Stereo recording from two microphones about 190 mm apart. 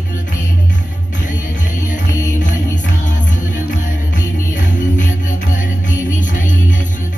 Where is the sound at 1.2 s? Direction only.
40° left (ahead or behind).